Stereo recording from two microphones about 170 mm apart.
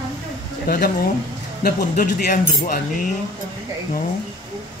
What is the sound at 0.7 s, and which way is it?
Speech, 60° left (ahead or behind).